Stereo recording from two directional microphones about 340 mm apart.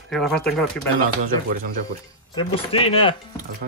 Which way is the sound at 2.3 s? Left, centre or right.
Centre.